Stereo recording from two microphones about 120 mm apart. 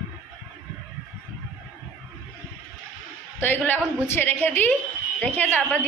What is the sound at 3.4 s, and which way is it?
A woman's voice, 15° left (ahead or behind).